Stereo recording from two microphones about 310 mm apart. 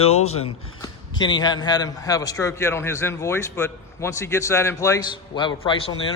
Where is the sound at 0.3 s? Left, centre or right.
Centre.